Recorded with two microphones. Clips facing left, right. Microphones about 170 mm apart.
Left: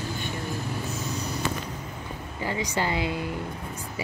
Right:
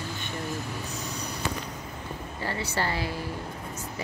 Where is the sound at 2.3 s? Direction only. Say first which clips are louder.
Left 3 dB; 15° left (ahead or behind).